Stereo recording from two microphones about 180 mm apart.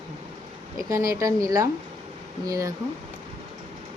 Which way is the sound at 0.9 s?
20° right (ahead or behind).